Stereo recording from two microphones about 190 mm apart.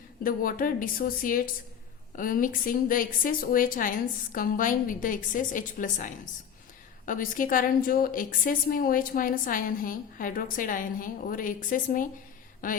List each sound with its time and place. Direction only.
0.2 s a woman's voice: 45° left (ahead or behind)